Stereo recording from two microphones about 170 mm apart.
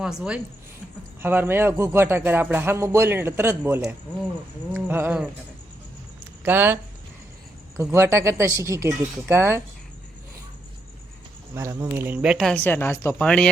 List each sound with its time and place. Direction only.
0.0 s a man's voice: 5° right (ahead or behind)
4.7 s a sound: 10° right (ahead or behind)
6.4 s speech: 10° right (ahead or behind)
7.8 s a man's voice: 15° right (ahead or behind)
11.5 s speech: 15° right (ahead or behind); by 13.5 s 5° left (ahead or behind)